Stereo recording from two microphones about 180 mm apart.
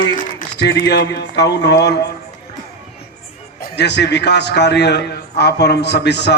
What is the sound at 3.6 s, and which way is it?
A man's voice, 70° left (ahead or behind).